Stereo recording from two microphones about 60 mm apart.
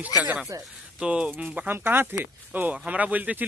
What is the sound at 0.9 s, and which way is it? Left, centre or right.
Speech, centre.